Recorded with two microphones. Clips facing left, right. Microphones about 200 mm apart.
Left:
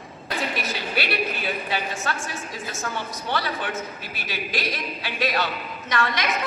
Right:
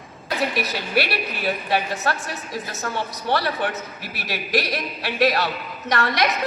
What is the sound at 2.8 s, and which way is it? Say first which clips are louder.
A man's voice: right 4 dB; 60° right (ahead or behind).